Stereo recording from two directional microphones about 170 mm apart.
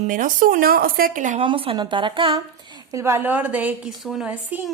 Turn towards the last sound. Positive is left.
turn(degrees=-10)  # may be behind; listen again after turning